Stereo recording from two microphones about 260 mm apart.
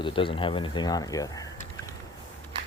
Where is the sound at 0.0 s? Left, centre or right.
Centre.